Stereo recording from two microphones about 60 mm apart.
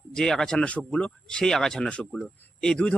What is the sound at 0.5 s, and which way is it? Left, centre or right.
Speech, left.